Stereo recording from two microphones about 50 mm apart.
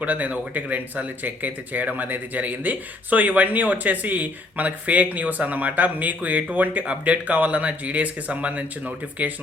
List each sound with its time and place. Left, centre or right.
0.0 s speech: right